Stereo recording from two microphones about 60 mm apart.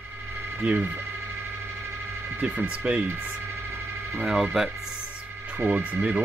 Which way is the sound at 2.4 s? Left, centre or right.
Right.